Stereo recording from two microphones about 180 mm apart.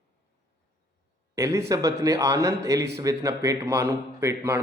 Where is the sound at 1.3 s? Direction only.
15° right (ahead or behind).